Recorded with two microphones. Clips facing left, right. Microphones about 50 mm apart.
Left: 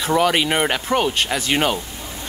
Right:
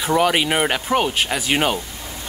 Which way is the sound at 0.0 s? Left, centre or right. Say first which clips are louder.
Even; centre.